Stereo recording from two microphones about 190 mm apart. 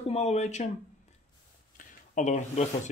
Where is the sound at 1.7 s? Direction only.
40° left (ahead or behind).